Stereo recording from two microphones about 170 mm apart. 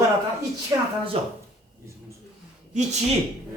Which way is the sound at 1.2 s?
35° right (ahead or behind).